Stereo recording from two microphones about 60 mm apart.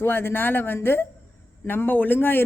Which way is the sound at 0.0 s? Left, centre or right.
Left.